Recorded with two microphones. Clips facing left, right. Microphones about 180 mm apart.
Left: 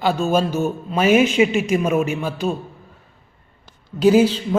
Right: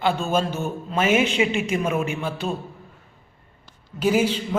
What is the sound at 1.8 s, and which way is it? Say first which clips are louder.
Speech: left 4 dB; 10° left (ahead or behind).